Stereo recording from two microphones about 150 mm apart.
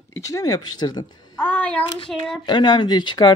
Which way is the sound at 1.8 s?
30° left (ahead or behind).